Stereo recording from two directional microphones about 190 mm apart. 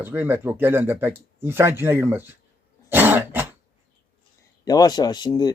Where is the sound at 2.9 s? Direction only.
10° right (ahead or behind).